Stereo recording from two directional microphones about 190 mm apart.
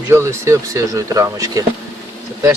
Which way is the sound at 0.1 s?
15° right (ahead or behind).